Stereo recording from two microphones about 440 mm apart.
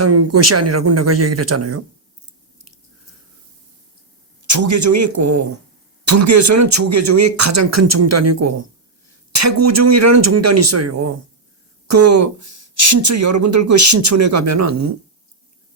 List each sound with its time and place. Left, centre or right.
0.0 s speech: right
4.4 s a man's voice: right